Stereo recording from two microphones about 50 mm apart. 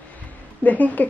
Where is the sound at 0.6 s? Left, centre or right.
Left.